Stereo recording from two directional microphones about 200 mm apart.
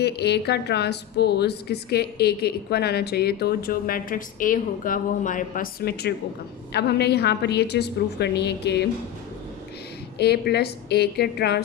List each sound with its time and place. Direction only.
0.0 s a woman's voice: 55° left (ahead or behind)
10.2 s a woman's voice: 55° left (ahead or behind)